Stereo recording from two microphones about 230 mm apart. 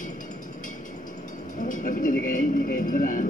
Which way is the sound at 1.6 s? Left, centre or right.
Left.